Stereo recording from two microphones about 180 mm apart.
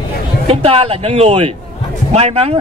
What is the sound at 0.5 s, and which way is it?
Speech, 35° right (ahead or behind).